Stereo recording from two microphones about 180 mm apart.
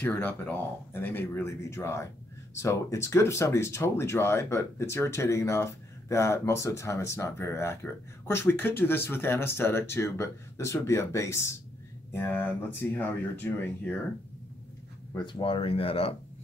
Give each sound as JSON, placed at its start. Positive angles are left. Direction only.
{"t": 0.0, "sound": "speech", "side_deg": 10}
{"t": 15.1, "sound": "speech", "side_deg": 25}